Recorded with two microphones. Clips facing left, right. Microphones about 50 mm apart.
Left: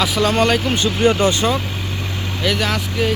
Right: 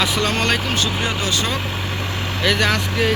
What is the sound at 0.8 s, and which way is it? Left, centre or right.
Speech, left.